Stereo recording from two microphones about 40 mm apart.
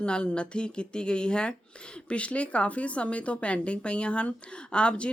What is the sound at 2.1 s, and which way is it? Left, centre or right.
Speech, left.